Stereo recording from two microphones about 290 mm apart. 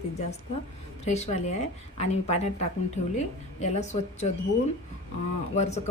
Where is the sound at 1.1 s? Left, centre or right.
Left.